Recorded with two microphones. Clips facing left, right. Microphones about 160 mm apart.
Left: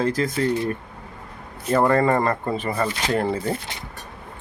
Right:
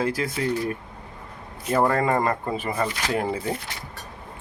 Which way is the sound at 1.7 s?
10° right (ahead or behind).